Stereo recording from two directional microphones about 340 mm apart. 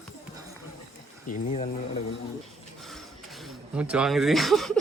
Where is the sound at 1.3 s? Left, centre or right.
Centre.